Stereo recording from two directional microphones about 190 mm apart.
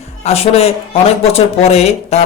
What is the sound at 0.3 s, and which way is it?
Speech, 35° left (ahead or behind).